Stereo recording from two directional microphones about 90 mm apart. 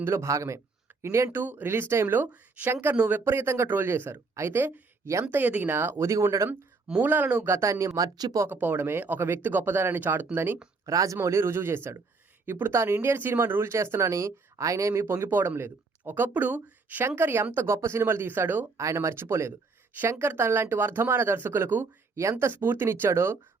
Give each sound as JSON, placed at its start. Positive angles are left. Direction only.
{"t": 0.0, "sound": "speech", "side_deg": -30}
{"t": 3.2, "sound": "speech", "side_deg": -30}
{"t": 6.5, "sound": "speech", "side_deg": -15}
{"t": 7.5, "sound": "speech", "side_deg": -35}
{"t": 8.4, "sound": "speech", "side_deg": -20}
{"t": 10.8, "sound": "speech", "side_deg": -35}
{"t": 18.8, "sound": "speech", "side_deg": -35}